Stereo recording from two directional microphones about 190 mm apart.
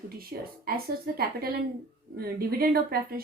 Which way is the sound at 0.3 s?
50° right (ahead or behind).